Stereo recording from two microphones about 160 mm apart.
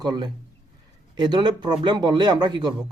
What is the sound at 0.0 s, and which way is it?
Speech, 25° right (ahead or behind).